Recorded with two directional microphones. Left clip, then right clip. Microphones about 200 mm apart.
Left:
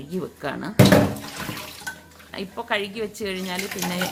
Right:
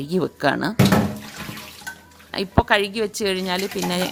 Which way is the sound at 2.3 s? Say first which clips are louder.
Right 8 dB; 55° right (ahead or behind).